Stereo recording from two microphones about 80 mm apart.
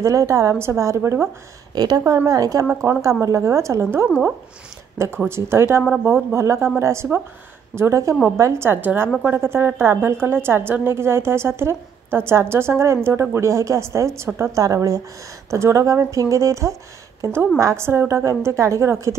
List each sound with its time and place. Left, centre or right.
0.0 s a woman's voice: right
1.8 s a woman's voice: right
2.7 s a woman's voice: right
4.9 s a woman's voice: right